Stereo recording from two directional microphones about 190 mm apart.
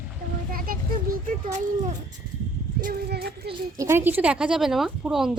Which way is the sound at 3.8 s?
10° right (ahead or behind).